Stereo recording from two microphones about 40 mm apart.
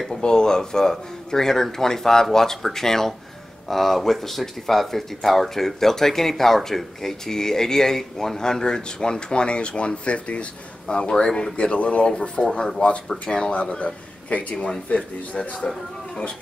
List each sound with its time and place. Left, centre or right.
0.1 s speech: centre
11.5 s speech: left
12.5 s speech: centre
13.2 s speech: left